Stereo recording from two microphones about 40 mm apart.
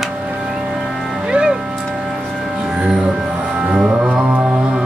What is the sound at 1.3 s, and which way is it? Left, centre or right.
Music, right.